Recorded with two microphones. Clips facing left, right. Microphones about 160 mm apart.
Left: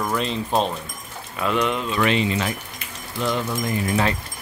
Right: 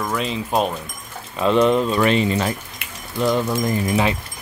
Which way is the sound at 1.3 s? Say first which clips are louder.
Right 7 dB; 30° right (ahead or behind).